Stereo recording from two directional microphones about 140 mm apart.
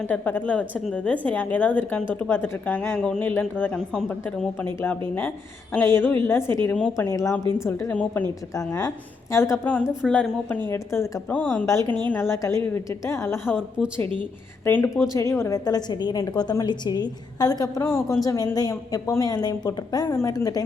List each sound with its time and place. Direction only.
0.0 s speech: 10° left (ahead or behind)
6.9 s a woman's voice: 20° left (ahead or behind)
10.1 s speech: 5° left (ahead or behind)
10.7 s a woman's voice: 20° left (ahead or behind)
13.8 s a woman's voice: 5° left (ahead or behind); by 20.7 s 25° left (ahead or behind)